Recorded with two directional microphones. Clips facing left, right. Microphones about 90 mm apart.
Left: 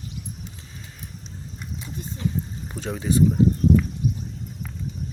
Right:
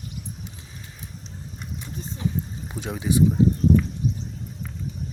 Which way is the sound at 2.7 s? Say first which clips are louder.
Even; 5° right (ahead or behind).